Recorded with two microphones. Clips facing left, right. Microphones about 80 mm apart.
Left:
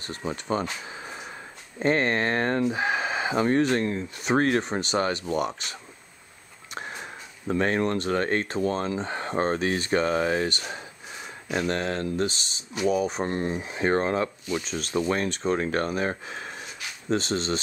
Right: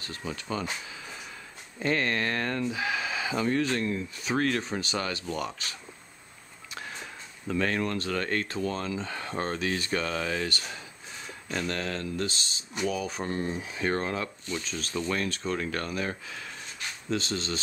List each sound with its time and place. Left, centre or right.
0.0 s speech: left
0.8 s a sound: left
1.8 s speech: left
6.9 s speech: left